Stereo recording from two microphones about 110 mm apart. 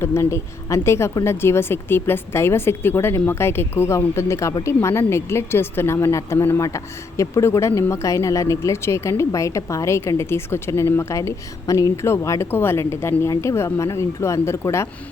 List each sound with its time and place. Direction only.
0.0 s a woman's voice: 25° left (ahead or behind)